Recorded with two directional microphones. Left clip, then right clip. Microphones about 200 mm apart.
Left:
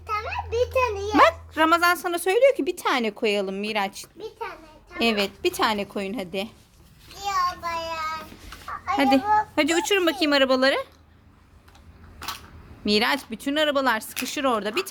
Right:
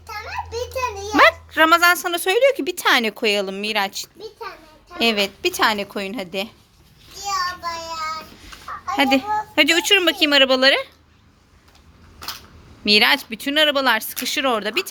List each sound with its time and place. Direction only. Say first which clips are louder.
0.2 s a child's voice: even; 25° left (ahead or behind)
1.1 s a woman's voice: right 5 dB; 5° right (ahead or behind)
7.3 s child singing: right 1 dB; 10° left (ahead or behind)
8.6 s speech: right 2 dB; 5° right (ahead or behind)
12.2 s camera: right 1 dB; centre (ahead or behind)
12.8 s speech: right 7 dB; 5° right (ahead or behind)